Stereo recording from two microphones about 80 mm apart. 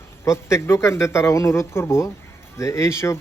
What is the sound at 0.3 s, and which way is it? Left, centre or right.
A man's voice, left.